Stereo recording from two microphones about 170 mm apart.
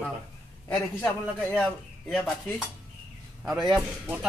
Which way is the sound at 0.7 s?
5° left (ahead or behind).